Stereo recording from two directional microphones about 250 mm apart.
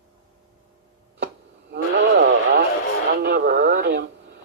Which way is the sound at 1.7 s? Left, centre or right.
Right.